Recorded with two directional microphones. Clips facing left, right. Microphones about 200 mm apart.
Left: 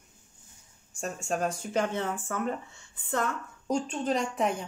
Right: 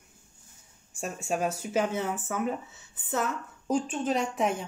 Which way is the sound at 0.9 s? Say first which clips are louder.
Right 1 dB; 5° right (ahead or behind).